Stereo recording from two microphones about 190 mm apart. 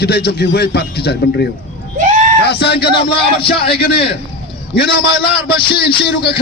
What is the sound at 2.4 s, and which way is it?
Speech, 60° left (ahead or behind).